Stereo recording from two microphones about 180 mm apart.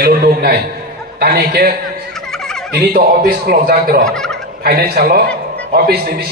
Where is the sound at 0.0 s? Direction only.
55° right (ahead or behind).